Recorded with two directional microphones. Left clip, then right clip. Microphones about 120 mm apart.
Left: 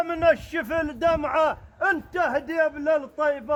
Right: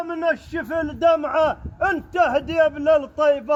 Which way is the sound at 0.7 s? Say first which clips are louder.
Right 5 dB; 20° right (ahead or behind).